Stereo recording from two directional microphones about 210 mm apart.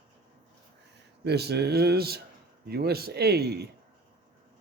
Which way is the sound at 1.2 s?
50° right (ahead or behind).